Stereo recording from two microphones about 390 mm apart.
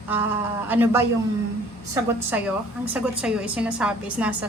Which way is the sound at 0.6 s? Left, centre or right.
Centre.